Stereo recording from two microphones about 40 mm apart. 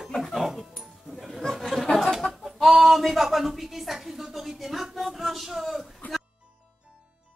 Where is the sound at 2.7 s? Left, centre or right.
Centre.